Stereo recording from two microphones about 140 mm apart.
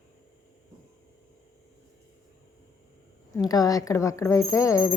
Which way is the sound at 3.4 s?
25° left (ahead or behind).